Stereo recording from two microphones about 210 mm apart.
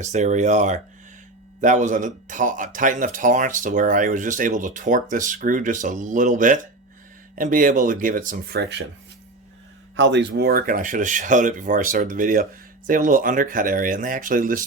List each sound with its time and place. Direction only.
0.0 s speech: 35° right (ahead or behind)
9.9 s speech: 60° right (ahead or behind); by 14.6 s 40° right (ahead or behind)